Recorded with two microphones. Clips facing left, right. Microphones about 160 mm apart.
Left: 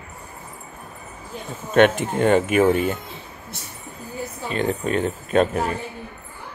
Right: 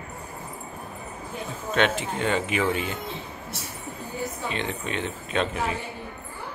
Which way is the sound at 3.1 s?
Centre (ahead or behind).